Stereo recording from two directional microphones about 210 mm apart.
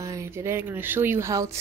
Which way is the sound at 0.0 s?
15° right (ahead or behind).